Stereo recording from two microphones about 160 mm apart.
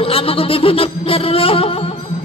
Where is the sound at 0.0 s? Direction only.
35° left (ahead or behind).